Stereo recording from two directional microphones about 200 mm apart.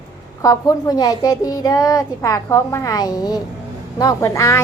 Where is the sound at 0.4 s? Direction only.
15° left (ahead or behind).